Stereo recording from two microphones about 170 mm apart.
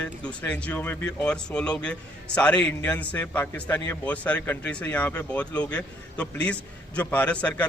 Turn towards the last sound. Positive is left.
turn(degrees=5)  # may be behind; listen again after turning